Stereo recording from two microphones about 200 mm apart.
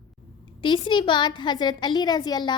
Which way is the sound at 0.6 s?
25° left (ahead or behind).